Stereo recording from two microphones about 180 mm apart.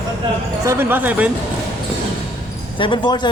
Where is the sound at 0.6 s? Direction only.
15° right (ahead or behind).